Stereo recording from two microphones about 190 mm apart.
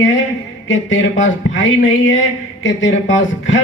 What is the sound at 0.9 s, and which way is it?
Speech, 80° left.